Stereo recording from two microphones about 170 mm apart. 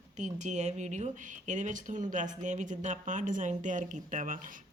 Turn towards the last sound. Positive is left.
turn(degrees=-50)  # may be behind; listen again after turning